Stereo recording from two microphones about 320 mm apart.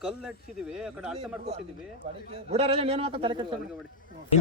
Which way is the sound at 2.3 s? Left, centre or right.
Centre.